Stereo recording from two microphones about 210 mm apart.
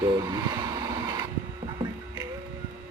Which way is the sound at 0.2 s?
20° right (ahead or behind).